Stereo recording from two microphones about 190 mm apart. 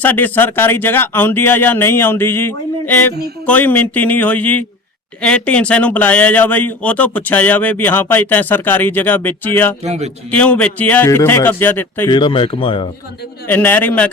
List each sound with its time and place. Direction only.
0.0 s speech: 10° left (ahead or behind)
9.8 s speech: 35° right (ahead or behind)
10.3 s speech: 5° left (ahead or behind)
12.1 s speech: 25° left (ahead or behind)
13.5 s speech: 10° left (ahead or behind)